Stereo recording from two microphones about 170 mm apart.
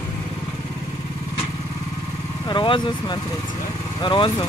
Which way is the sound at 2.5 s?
30° left (ahead or behind).